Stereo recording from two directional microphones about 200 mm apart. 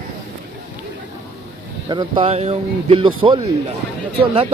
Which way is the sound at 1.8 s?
20° right (ahead or behind).